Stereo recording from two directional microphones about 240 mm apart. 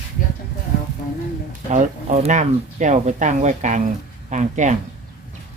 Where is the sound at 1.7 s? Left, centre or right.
Right.